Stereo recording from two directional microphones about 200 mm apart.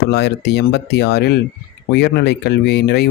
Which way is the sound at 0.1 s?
55° left (ahead or behind).